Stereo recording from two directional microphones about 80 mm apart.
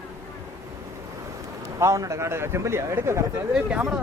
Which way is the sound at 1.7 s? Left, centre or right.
Right.